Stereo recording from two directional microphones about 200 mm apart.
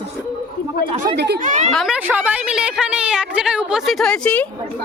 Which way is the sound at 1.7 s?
Centre (ahead or behind).